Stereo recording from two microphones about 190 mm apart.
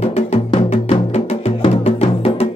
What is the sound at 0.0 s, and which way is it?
Music, 35° left (ahead or behind).